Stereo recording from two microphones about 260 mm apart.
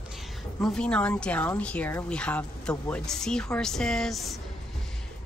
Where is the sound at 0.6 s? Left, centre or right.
Centre.